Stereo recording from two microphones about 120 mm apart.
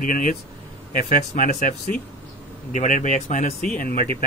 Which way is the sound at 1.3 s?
90° left.